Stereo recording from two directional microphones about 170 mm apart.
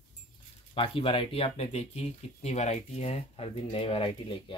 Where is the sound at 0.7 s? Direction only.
30° left (ahead or behind).